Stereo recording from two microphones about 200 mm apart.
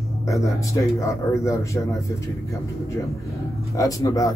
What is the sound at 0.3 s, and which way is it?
A man's voice, 15° left (ahead or behind).